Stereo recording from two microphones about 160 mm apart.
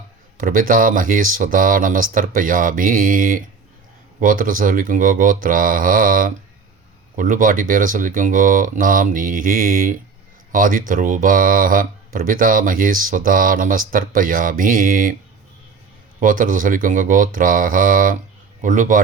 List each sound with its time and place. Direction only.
0.3 s speech: 60° right (ahead or behind)
16.2 s a man's voice: 55° right (ahead or behind)